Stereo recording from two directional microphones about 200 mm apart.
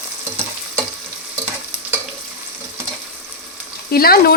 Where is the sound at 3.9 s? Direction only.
50° left (ahead or behind).